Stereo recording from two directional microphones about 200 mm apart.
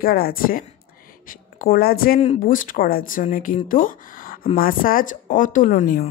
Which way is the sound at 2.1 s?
40° left (ahead or behind).